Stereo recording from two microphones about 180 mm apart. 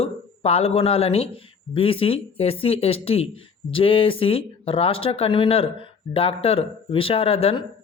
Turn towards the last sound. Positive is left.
turn(degrees=30)  # may be behind; listen again after turning